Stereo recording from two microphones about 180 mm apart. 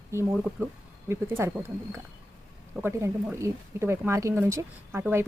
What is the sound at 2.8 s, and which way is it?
Speech, 15° right (ahead or behind).